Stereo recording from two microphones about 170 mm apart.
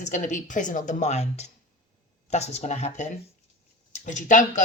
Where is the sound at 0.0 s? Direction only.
45° left (ahead or behind).